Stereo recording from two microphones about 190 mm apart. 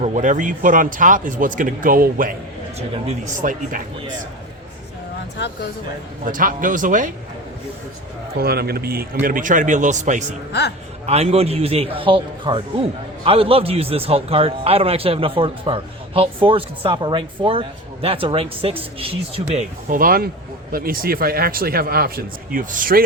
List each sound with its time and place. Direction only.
0.0 s speech: 40° right (ahead or behind)
2.7 s a man's voice: 35° right (ahead or behind)
6.2 s speech: 45° right (ahead or behind)
8.4 s a man's voice: 55° right (ahead or behind); by 19.6 s 30° right (ahead or behind)
19.9 s speech: 50° right (ahead or behind)